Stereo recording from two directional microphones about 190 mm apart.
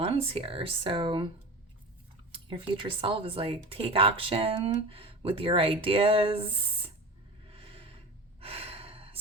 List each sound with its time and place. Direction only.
0.0 s speech: 30° right (ahead or behind)
2.3 s speech: 25° right (ahead or behind)
7.5 s a sound: 30° right (ahead or behind)
8.4 s sigh: 30° right (ahead or behind)